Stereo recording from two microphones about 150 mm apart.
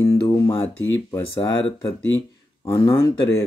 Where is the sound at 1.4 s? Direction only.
35° left (ahead or behind).